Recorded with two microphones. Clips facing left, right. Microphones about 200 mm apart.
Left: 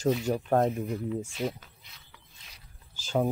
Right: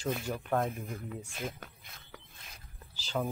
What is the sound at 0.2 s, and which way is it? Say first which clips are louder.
Speech: left 7 dB; 45° left (ahead or behind).